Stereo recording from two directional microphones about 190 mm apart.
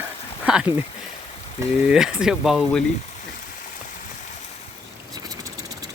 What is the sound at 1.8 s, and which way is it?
Speech, 5° right (ahead or behind).